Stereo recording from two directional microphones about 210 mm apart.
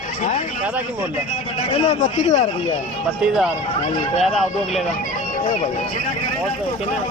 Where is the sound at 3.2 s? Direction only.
5° right (ahead or behind).